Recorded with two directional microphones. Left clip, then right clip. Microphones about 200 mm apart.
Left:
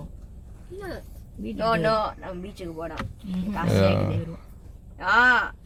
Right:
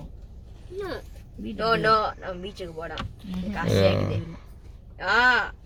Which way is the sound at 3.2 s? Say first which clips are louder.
Left 1 dB; centre (ahead or behind).